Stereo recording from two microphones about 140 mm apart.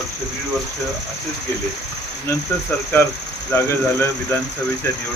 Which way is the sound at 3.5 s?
15° left (ahead or behind).